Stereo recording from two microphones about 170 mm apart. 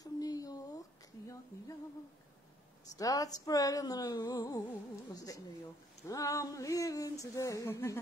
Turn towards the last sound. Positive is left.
turn(degrees=15)  # may be behind; listen again after turning